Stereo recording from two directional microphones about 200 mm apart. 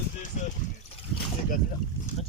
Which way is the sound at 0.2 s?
40° left (ahead or behind).